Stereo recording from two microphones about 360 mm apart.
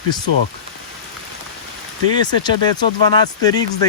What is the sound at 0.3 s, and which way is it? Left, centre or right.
Speech, right.